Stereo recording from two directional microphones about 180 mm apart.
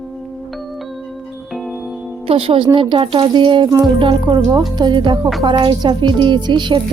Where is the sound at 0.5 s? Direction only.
Centre (ahead or behind).